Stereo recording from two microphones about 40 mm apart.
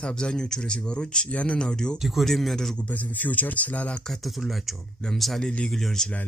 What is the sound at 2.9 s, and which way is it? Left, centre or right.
Speech, left.